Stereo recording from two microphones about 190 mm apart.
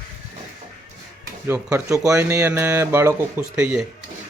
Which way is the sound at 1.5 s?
15° right (ahead or behind).